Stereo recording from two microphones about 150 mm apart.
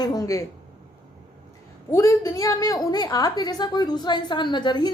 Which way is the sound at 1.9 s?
20° left (ahead or behind).